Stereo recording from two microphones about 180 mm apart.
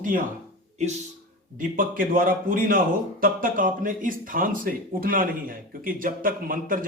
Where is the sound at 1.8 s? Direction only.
50° right (ahead or behind).